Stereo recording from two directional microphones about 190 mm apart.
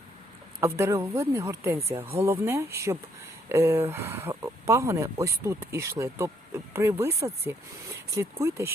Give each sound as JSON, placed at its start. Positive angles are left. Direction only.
{"t": 0.6, "sound": "speech", "side_deg": -15}